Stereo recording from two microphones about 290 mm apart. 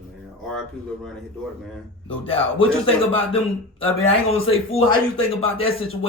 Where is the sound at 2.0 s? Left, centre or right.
Centre.